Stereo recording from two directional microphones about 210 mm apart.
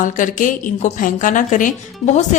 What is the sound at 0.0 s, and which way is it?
A woman's voice, 40° left (ahead or behind).